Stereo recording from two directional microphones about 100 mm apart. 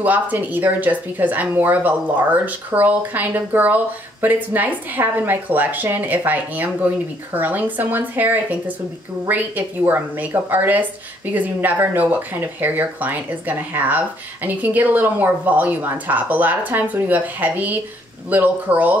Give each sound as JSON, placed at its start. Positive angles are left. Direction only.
{"t": 0.0, "sound": "speech", "side_deg": -15}